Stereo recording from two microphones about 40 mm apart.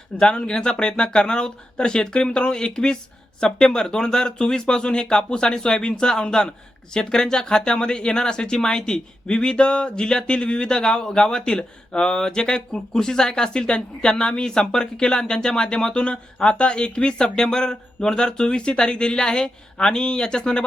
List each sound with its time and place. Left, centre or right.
0.2 s speech: left